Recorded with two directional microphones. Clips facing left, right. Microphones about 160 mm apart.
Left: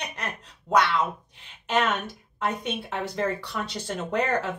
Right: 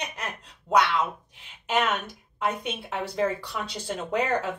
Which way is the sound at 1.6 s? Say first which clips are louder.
Left 1 dB; 10° right (ahead or behind).